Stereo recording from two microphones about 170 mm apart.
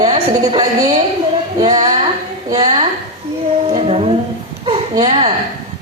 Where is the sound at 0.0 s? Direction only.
25° right (ahead or behind).